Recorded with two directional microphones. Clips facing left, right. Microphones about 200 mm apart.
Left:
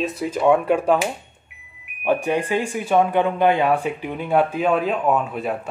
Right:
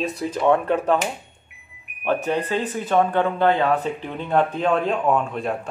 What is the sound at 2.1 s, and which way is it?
Speech, 10° left (ahead or behind).